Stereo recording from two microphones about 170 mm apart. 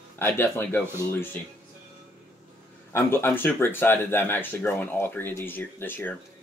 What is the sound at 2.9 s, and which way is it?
Speech, 15° left (ahead or behind).